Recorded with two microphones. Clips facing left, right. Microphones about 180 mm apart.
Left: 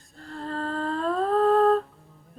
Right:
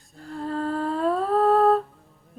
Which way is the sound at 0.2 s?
5° right (ahead or behind).